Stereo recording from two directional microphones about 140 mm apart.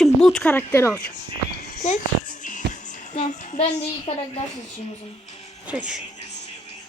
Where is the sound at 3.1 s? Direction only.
40° left (ahead or behind).